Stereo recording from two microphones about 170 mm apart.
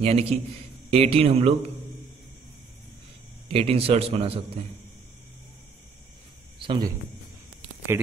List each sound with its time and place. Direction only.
0.0 s a man's voice: 35° right (ahead or behind)
3.4 s a man's voice: 35° right (ahead or behind)
6.6 s a man's voice: 30° right (ahead or behind)